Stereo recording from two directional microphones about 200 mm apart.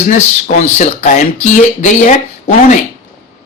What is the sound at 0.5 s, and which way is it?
Speech, 35° left (ahead or behind).